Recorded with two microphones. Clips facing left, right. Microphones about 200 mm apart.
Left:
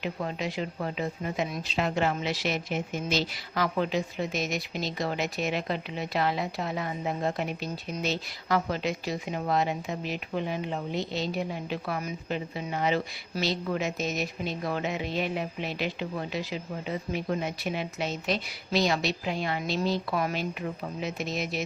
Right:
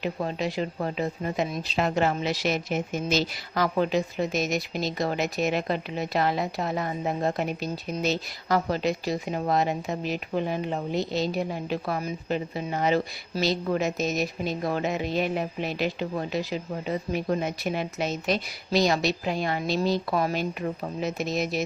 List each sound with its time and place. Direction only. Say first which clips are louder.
0.0 s speech: right 3 dB; 35° right (ahead or behind)